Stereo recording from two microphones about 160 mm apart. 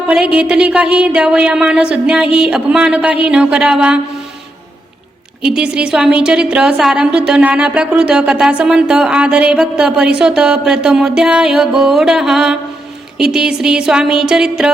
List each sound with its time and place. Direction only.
0.1 s speech: 5° right (ahead or behind)
5.4 s a woman's voice: 5° right (ahead or behind)